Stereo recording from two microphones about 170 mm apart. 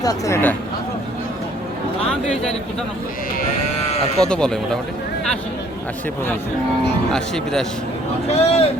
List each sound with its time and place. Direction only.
0.0 s speech: 20° left (ahead or behind)
4.2 s speech: 5° left (ahead or behind)
7.1 s speech: 5° left (ahead or behind)
8.3 s speech: 35° left (ahead or behind)